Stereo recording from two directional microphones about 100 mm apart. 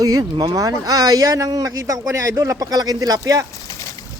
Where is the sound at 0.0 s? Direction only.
40° right (ahead or behind).